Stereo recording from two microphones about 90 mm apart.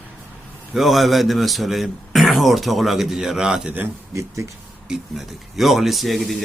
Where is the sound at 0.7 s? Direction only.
Centre (ahead or behind).